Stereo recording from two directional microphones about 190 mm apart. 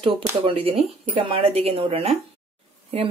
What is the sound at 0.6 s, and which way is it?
Speech, 30° right (ahead or behind).